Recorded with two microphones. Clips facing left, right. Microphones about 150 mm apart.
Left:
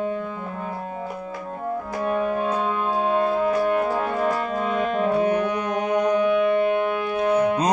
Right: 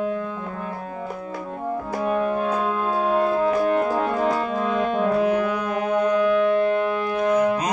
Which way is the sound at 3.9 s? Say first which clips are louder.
Right 1 dB; centre (ahead or behind).